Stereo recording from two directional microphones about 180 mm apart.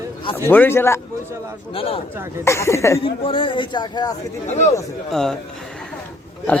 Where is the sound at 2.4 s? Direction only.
15° left (ahead or behind).